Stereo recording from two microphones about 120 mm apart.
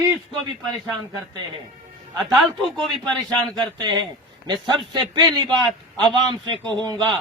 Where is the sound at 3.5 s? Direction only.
35° right (ahead or behind).